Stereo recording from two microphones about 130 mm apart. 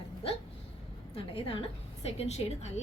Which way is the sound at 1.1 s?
45° left (ahead or behind).